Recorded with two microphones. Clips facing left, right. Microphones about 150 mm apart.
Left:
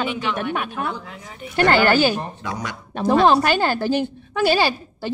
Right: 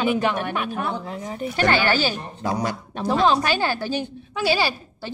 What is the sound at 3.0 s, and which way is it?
A woman's voice, 55° left (ahead or behind).